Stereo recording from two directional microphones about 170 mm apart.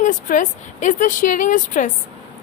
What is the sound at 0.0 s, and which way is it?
A woman's voice, 50° left (ahead or behind).